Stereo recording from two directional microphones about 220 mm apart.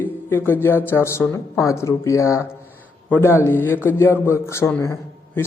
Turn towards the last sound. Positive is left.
turn(degrees=10)  # may be behind; listen again after turning